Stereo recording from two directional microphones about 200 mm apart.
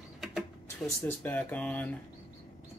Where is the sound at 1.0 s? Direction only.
10° left (ahead or behind).